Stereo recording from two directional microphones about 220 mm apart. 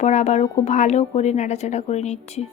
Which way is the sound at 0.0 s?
30° left (ahead or behind).